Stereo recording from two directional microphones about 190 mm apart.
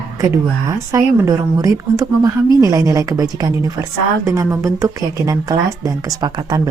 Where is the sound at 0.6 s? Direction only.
15° right (ahead or behind).